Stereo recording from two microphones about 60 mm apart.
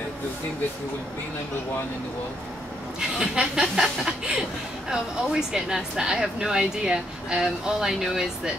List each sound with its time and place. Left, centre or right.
3.0 s speech: centre